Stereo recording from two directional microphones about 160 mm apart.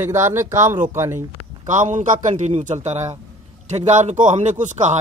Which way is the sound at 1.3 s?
50° right (ahead or behind).